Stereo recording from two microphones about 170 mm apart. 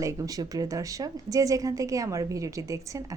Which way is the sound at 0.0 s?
20° right (ahead or behind).